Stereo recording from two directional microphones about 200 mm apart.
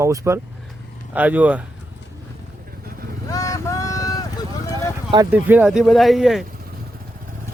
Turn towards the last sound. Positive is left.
turn(degrees=0)  # may be behind; listen again after turning